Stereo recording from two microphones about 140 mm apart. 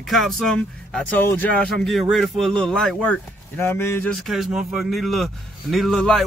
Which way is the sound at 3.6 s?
20° left (ahead or behind).